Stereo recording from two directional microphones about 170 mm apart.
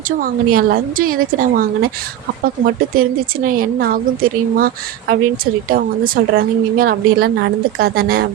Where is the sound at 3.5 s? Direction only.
60° right (ahead or behind).